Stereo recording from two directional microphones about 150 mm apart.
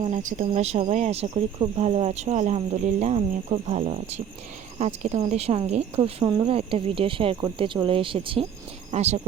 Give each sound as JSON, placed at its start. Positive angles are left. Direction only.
{"t": 0.1, "sound": "speech", "side_deg": -55}
{"t": 4.8, "sound": "speech", "side_deg": -45}
{"t": 6.2, "sound": "speech", "side_deg": -25}
{"t": 6.5, "sound": "speech", "side_deg": -40}
{"t": 8.9, "sound": "speech", "side_deg": -45}